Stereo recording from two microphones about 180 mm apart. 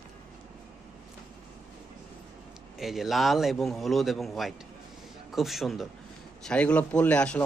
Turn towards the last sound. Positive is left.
turn(degrees=5)  # may be behind; listen again after turning